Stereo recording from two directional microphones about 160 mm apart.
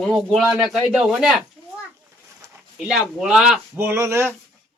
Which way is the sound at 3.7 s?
15° right (ahead or behind).